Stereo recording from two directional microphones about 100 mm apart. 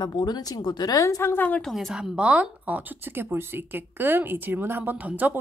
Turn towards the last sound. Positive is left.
turn(degrees=-20)  # may be behind; listen again after turning